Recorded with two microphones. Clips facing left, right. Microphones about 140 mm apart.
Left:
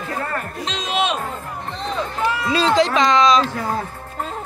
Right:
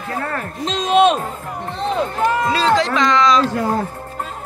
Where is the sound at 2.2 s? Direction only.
45° right (ahead or behind).